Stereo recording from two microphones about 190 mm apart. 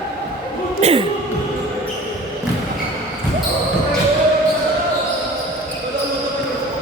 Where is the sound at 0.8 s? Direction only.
30° right (ahead or behind).